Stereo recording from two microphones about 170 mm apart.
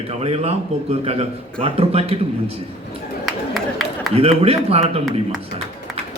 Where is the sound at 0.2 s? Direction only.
35° right (ahead or behind).